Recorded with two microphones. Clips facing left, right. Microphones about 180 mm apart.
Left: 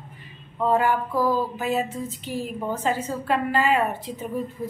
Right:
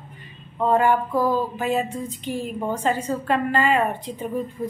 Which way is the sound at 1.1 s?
15° right (ahead or behind).